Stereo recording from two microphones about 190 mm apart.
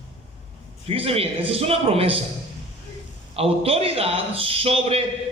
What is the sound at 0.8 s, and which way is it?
A man's voice, 30° right (ahead or behind).